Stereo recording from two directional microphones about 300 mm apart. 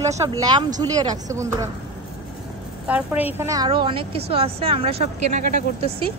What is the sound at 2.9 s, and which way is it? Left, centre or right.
A woman's voice, centre.